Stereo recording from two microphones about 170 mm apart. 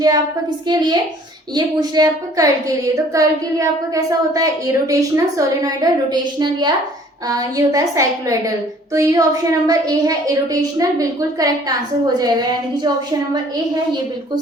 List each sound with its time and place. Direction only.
0.7 s a woman's voice: 25° right (ahead or behind)